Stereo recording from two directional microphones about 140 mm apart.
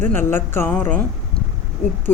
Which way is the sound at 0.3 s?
15° left (ahead or behind).